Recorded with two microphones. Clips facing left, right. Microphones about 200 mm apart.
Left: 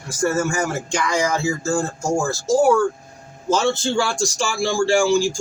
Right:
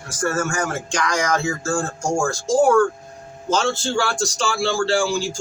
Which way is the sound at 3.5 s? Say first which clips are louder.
Left 2 dB; 20° left (ahead or behind).